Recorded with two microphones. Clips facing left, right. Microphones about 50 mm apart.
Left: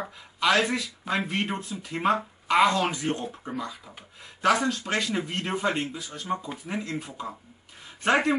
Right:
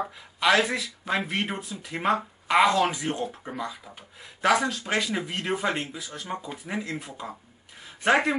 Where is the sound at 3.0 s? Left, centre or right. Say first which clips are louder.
Even; centre.